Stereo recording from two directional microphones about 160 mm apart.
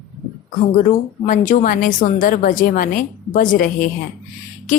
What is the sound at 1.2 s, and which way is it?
A woman's voice, 55° left (ahead or behind).